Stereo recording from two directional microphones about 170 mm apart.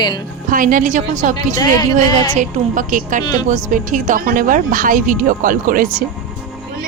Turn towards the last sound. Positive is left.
turn(degrees=-55)  # may be behind; listen again after turning